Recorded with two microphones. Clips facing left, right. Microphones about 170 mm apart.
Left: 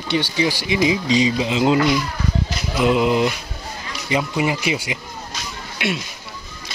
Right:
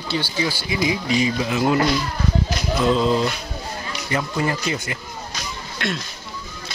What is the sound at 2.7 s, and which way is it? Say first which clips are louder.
Speech: left 2 dB; 15° left (ahead or behind).